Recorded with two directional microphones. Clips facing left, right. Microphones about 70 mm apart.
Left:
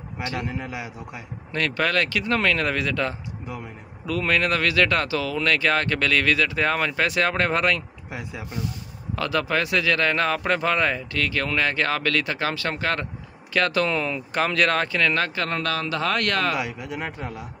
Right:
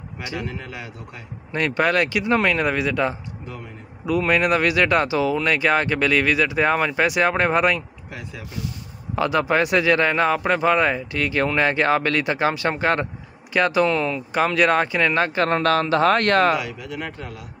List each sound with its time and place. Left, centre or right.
0.4 s a man's voice: centre
1.8 s speech: centre
8.1 s speech: centre
9.1 s speech: right
13.8 s speech: centre; by 15.4 s right
15.4 s speech: right
16.5 s speech: left